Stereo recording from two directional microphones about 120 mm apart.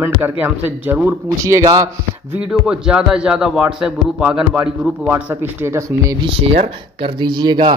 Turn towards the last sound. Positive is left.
turn(degrees=-40)  # may be behind; listen again after turning